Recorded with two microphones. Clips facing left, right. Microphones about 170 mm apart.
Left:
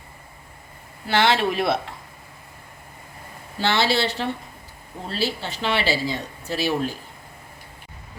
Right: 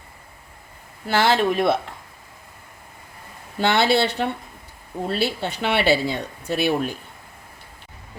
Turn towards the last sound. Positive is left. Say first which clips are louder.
# right 3 dB
turn(degrees=-60)  # may be behind; listen again after turning